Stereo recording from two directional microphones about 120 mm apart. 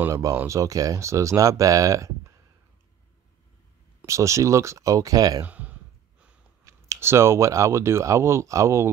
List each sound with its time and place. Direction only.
0.1 s speech: 25° right (ahead or behind)
4.0 s speech: 25° right (ahead or behind)
5.4 s a sound: 10° right (ahead or behind)
6.6 s speech: 25° right (ahead or behind)